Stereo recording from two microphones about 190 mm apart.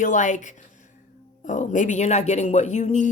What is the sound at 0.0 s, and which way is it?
Speech, 40° left (ahead or behind).